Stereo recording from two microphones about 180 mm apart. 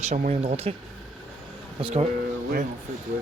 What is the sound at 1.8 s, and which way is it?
Speech, 35° right (ahead or behind).